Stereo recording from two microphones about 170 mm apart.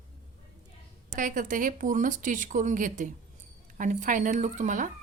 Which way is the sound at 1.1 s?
50° right (ahead or behind).